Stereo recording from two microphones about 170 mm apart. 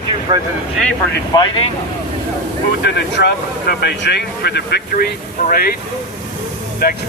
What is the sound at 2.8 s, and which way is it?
Speech, 80° left.